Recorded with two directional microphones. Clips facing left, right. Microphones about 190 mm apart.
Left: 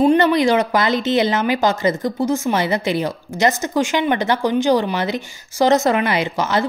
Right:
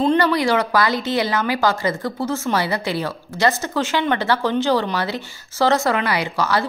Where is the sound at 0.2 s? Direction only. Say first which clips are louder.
Left 3 dB; 20° left (ahead or behind).